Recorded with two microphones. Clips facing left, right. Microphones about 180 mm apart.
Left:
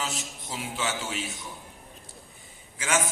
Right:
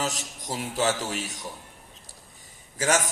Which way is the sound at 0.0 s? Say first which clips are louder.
Right 3 dB; 40° right (ahead or behind).